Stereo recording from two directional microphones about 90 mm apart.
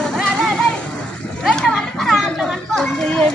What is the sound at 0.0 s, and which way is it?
Music, 5° left (ahead or behind).